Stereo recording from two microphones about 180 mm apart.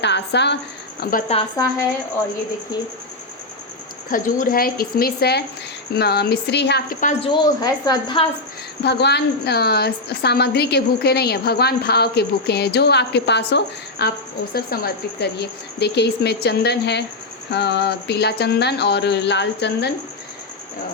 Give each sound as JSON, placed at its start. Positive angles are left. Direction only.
{"t": 0.0, "sound": "a woman's voice", "side_deg": 70}
{"t": 4.1, "sound": "a woman's voice", "side_deg": 50}
{"t": 7.0, "sound": "speech", "side_deg": 40}
{"t": 7.3, "sound": "a woman's voice", "side_deg": 20}
{"t": 8.8, "sound": "a woman's voice", "side_deg": 70}
{"t": 14.5, "sound": "a woman's voice", "side_deg": 60}
{"t": 17.5, "sound": "a sound", "side_deg": 70}